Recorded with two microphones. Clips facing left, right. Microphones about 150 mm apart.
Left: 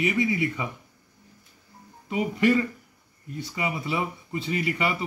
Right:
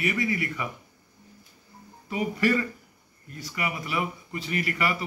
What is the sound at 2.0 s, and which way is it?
A man's voice, 20° left (ahead or behind).